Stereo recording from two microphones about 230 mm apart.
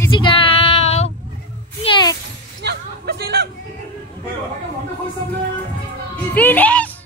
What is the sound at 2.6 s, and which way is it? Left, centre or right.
Hubbub, right.